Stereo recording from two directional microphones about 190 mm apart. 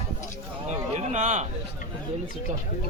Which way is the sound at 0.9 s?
40° right (ahead or behind).